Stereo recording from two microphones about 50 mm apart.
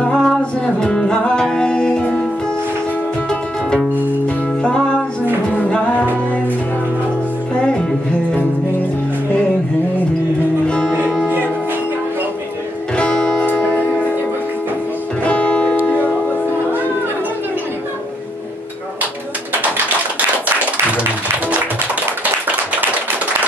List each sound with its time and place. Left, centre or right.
0.0 s music: centre
12.9 s music: centre
15.2 s music: left